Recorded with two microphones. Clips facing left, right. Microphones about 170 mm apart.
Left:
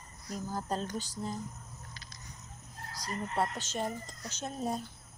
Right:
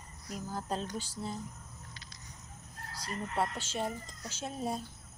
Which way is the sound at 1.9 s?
40° left (ahead or behind).